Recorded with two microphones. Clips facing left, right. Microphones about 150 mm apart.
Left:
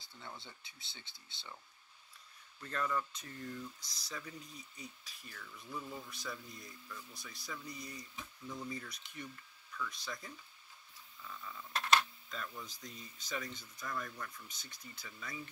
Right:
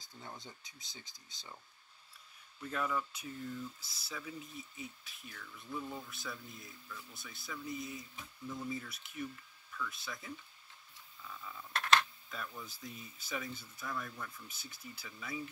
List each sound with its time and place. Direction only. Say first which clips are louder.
0.4 s speech: right 2 dB; 45° right (ahead or behind)
2.6 s speech: right 1 dB; 5° right (ahead or behind)
11.2 s a sound: even; 5° right (ahead or behind)
11.8 s speech: right 1 dB; 10° left (ahead or behind)
12.3 s speech: even; 5° right (ahead or behind)